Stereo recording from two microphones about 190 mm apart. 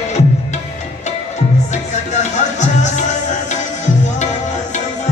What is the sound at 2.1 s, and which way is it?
Music, 40° left (ahead or behind).